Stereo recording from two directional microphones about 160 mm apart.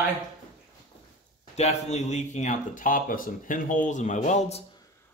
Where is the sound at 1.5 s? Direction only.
45° left (ahead or behind).